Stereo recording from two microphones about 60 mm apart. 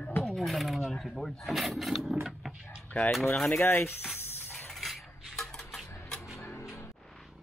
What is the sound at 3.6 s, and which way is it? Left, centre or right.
Speech, left.